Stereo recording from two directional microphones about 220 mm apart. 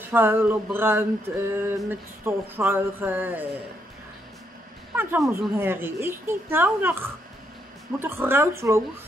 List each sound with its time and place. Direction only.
0.1 s a woman's voice: 10° right (ahead or behind)
4.9 s a woman's voice: 10° right (ahead or behind)